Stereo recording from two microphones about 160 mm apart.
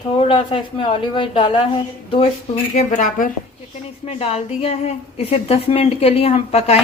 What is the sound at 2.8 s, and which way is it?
Speech, 50° left (ahead or behind).